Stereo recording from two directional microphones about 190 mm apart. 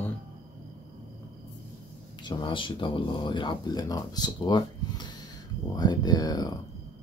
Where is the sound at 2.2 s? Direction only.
25° left (ahead or behind).